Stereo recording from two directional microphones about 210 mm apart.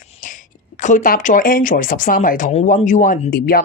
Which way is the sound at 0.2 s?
35° left (ahead or behind).